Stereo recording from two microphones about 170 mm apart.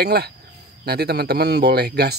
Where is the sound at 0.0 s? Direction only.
70° right (ahead or behind).